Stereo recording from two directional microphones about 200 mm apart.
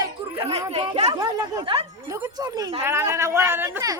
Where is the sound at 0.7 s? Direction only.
35° right (ahead or behind).